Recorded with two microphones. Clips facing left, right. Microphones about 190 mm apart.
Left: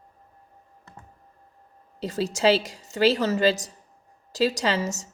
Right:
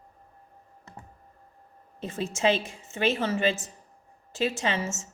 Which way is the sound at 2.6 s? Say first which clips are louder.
Left 7 dB; 40° left (ahead or behind).